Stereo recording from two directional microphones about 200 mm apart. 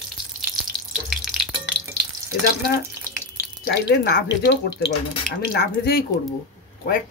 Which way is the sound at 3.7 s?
55° left (ahead or behind).